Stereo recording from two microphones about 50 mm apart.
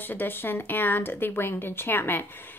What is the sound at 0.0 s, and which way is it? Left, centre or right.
A woman's voice, left.